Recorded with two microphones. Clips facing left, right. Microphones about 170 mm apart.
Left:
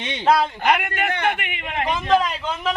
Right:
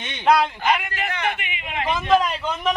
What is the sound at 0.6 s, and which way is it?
A man's voice, 65° left (ahead or behind).